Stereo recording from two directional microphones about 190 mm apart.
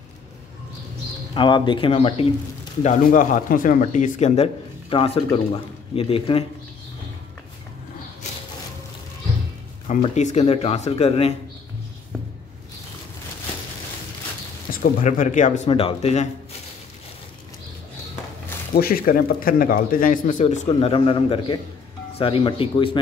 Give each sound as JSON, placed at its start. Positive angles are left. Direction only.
{"t": 1.3, "sound": "speech", "side_deg": 25}
{"t": 2.8, "sound": "speech", "side_deg": 40}
{"t": 9.8, "sound": "speech", "side_deg": 40}
{"t": 14.7, "sound": "speech", "side_deg": 45}
{"t": 18.8, "sound": "a man's voice", "side_deg": 50}